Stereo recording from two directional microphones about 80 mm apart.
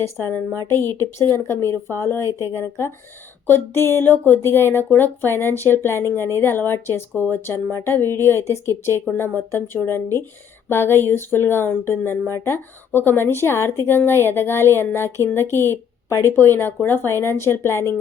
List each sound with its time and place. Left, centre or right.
0.0 s speech: left